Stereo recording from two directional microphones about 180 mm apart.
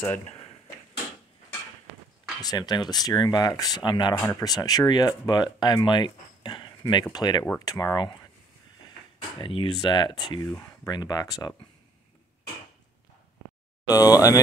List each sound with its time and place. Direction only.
0.0 s speech: 10° left (ahead or behind)
2.4 s speech: 20° left (ahead or behind)
9.4 s speech: 30° left (ahead or behind)
13.8 s speech: 20° left (ahead or behind)